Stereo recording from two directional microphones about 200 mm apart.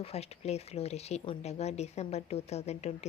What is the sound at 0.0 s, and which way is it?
Speech, 30° left (ahead or behind).